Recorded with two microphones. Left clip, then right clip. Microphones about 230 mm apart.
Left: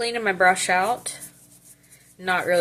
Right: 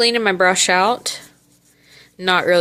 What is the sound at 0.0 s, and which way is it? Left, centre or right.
Speech, right.